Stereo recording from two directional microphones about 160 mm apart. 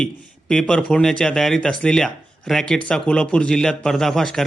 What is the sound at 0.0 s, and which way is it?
A man's voice, 5° left (ahead or behind).